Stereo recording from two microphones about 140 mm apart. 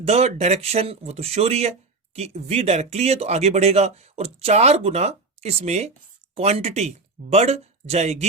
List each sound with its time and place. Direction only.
0.0 s speech: 50° right (ahead or behind)